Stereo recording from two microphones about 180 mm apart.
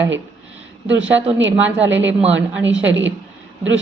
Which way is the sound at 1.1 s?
90° right.